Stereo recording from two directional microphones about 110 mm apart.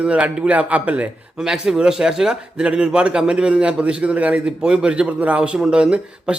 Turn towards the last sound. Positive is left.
turn(degrees=-10)  # may be behind; listen again after turning